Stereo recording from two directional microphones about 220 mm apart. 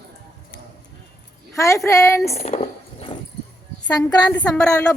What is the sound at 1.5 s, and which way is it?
Speech, 15° left (ahead or behind).